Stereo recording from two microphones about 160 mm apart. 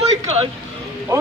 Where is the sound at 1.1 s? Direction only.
20° right (ahead or behind).